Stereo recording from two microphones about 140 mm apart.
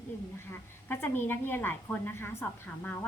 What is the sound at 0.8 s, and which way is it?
A woman's voice, 15° left (ahead or behind).